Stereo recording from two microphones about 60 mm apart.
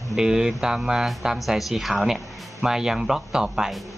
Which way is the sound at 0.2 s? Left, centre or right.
Centre.